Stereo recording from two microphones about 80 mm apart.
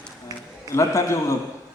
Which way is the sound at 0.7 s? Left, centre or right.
Left.